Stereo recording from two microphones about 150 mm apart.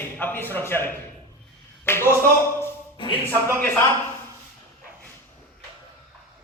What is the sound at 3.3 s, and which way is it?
Speech, 15° left (ahead or behind).